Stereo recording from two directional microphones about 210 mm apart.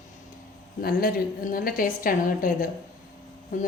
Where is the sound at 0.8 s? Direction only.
45° left (ahead or behind).